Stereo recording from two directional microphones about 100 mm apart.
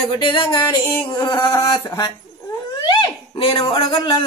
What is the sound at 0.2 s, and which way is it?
Music, 50° left (ahead or behind).